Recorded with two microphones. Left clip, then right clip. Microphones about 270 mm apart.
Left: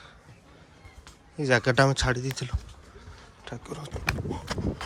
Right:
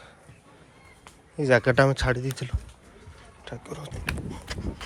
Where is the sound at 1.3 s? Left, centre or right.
Centre.